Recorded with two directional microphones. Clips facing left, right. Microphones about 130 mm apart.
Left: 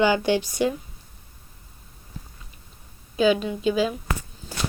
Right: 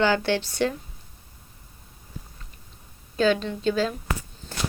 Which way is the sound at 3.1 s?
10° left (ahead or behind).